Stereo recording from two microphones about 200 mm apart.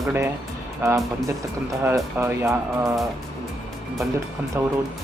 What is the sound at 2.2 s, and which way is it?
Speech, 15° right (ahead or behind).